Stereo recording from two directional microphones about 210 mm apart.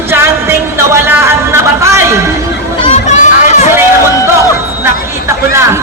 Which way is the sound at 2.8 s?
30° left (ahead or behind).